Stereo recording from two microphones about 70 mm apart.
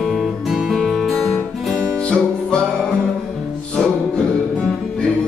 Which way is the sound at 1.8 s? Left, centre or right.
Centre.